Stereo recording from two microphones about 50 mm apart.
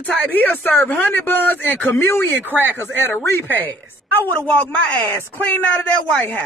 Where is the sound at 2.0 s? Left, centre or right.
Left.